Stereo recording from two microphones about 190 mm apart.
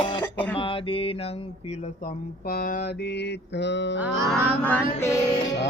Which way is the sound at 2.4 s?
50° left (ahead or behind).